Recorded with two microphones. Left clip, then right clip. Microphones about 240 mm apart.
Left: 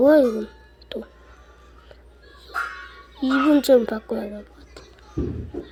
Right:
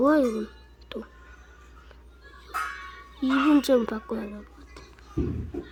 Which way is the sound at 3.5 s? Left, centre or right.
Centre.